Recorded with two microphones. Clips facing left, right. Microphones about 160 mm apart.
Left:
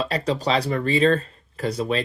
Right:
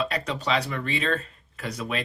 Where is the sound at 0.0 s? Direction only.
35° left (ahead or behind).